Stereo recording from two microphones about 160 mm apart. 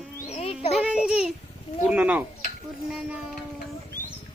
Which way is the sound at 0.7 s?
5° right (ahead or behind).